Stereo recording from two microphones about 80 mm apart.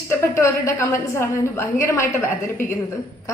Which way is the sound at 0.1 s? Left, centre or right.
Left.